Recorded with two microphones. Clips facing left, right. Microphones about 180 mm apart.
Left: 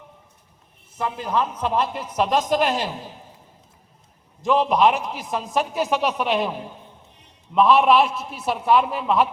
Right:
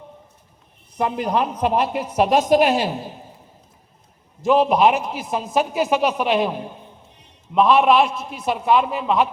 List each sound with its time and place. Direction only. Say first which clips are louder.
0.9 s a man's voice: right 3 dB; 15° right (ahead or behind)
4.4 s a woman's voice: right 3 dB; 5° right (ahead or behind)